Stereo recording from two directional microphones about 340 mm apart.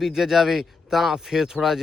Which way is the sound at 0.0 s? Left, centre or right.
Centre.